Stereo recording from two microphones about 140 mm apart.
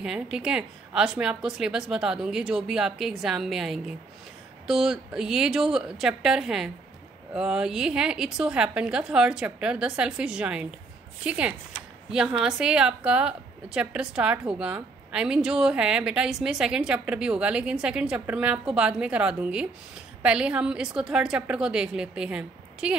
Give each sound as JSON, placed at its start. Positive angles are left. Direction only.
{"t": 0.0, "sound": "a woman's voice", "side_deg": -5}